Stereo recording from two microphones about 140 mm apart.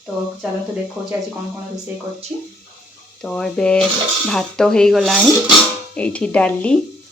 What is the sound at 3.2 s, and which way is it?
Speech, 5° left (ahead or behind).